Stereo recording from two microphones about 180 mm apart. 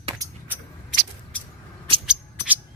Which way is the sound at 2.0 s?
5° right (ahead or behind).